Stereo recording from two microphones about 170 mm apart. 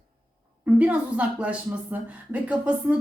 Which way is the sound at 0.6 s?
10° right (ahead or behind).